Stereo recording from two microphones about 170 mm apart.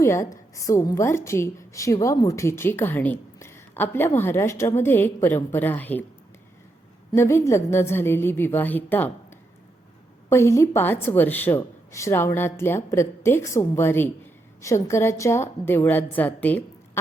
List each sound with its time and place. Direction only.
0.0 s a woman's voice: 15° left (ahead or behind)
7.1 s a woman's voice: 15° left (ahead or behind)
10.2 s a woman's voice: 15° left (ahead or behind)